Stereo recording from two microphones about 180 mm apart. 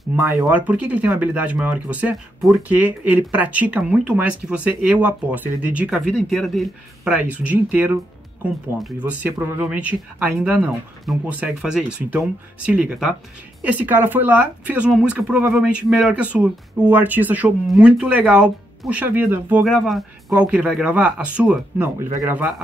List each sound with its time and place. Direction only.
0.4 s speech: 10° right (ahead or behind)